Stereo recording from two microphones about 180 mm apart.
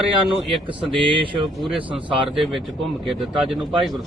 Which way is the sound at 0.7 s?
25° right (ahead or behind).